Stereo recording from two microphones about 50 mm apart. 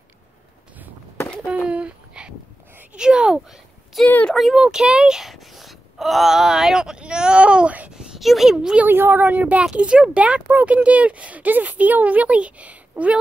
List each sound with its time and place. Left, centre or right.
1.7 s a sound: right
2.9 s speech: centre
4.0 s speech: centre
4.6 s speech: centre; by 7.9 s right
7.9 s speech: centre
8.8 s a woman's voice: right
9.8 s speech: right